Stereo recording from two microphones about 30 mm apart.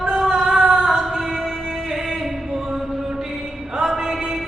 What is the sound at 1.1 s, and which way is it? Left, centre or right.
Music, centre.